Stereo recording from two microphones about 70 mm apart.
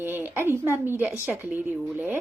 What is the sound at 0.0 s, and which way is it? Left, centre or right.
A woman's voice, right.